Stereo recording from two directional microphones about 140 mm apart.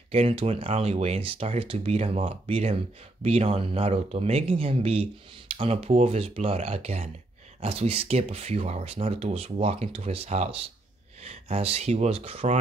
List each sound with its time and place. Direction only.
0.1 s speech: 45° right (ahead or behind)